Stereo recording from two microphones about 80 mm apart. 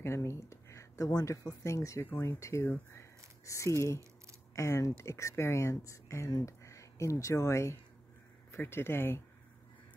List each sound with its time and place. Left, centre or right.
0.0 s speech: left